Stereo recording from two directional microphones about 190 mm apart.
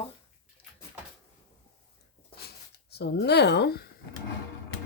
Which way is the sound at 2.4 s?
60° left (ahead or behind).